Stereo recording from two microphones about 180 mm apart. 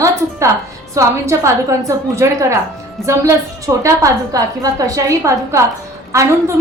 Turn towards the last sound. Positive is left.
turn(degrees=-15)  # may be behind; listen again after turning